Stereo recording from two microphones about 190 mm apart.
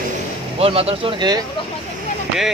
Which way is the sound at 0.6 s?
30° right (ahead or behind).